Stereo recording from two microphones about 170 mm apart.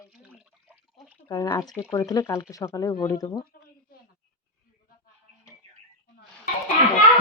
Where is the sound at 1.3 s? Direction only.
15° left (ahead or behind).